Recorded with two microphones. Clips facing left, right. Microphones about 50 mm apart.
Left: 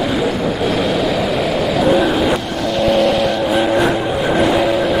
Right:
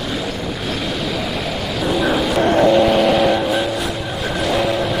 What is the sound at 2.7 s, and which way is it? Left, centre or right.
Vehicle, centre.